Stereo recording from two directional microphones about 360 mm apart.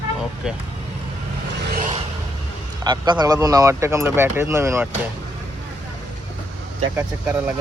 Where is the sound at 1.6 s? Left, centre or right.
Right.